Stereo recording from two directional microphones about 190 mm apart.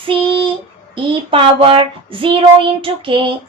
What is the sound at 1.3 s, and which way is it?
Child singing, 30° right (ahead or behind).